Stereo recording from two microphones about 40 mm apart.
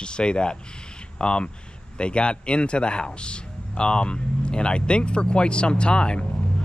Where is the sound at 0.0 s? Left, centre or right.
Left.